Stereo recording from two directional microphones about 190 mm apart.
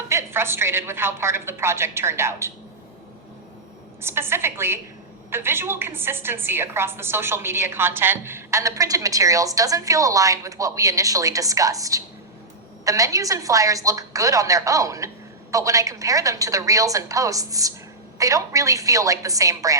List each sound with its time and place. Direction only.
0.1 s a woman's voice: 15° right (ahead or behind)
4.0 s a woman's voice: 15° right (ahead or behind)